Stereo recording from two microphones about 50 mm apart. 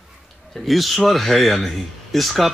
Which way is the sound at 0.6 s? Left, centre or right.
Centre.